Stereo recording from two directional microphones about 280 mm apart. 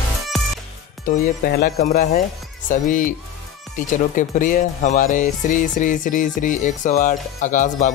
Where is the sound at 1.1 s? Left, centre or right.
Left.